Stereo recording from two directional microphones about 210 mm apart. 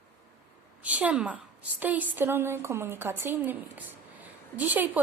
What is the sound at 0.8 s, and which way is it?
A woman's voice, 5° right (ahead or behind).